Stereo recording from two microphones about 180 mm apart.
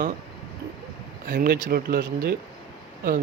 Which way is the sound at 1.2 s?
65° right (ahead or behind).